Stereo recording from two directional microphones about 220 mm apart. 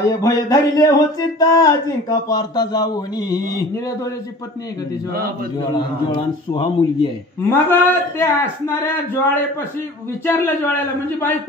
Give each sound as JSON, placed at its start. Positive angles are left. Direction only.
{"t": 0.2, "sound": "a man's voice", "side_deg": 15}
{"t": 6.5, "sound": "a man's voice", "side_deg": 20}